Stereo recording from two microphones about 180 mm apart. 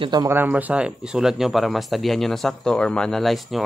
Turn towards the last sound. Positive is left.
turn(degrees=0)  # may be behind; listen again after turning